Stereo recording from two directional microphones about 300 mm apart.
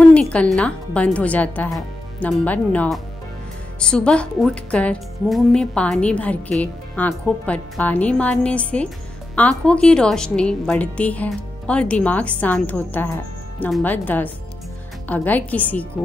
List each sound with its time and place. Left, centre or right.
0.0 s speech: centre